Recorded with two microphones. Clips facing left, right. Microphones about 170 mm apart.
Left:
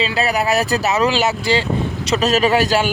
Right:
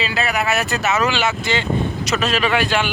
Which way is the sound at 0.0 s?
30° left (ahead or behind).